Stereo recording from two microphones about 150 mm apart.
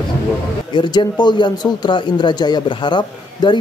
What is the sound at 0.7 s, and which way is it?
Speech, 30° left (ahead or behind).